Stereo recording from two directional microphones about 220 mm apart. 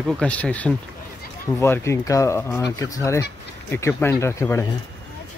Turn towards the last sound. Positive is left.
turn(degrees=10)  # may be behind; listen again after turning